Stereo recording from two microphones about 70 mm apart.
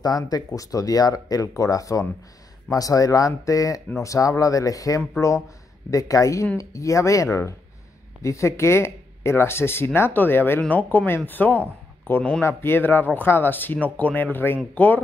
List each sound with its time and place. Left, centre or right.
0.0 s speech: left